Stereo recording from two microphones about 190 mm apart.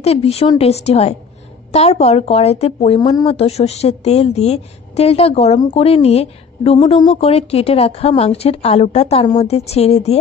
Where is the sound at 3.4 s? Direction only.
35° left (ahead or behind).